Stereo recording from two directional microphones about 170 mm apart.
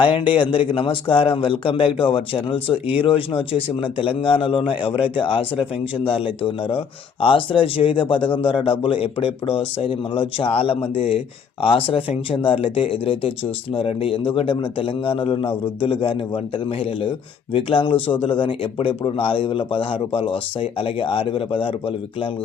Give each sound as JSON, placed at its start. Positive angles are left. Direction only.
{"t": 0.0, "sound": "speech", "side_deg": 30}